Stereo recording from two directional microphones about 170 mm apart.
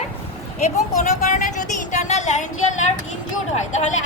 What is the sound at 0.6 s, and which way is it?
Speech, 45° left (ahead or behind).